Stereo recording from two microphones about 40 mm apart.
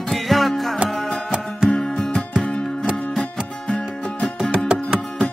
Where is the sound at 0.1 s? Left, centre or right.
Centre.